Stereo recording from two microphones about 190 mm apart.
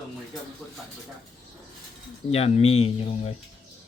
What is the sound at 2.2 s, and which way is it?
Speech, 30° left (ahead or behind).